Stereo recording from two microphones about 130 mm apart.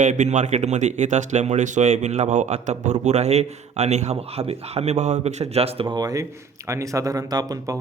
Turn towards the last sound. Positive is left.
turn(degrees=-30)  # may be behind; listen again after turning